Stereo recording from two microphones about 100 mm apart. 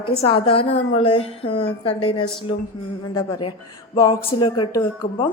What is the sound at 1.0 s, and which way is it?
A woman's voice, 75° left (ahead or behind).